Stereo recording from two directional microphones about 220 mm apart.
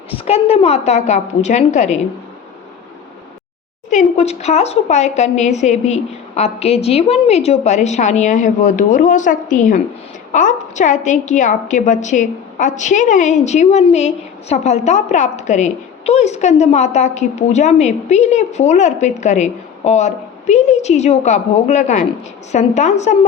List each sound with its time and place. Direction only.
0.1 s a woman's voice: 25° left (ahead or behind)
3.8 s a woman's voice: 30° left (ahead or behind)